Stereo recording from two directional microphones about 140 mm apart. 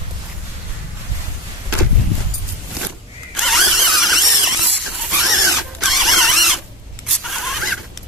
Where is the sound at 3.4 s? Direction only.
Centre (ahead or behind).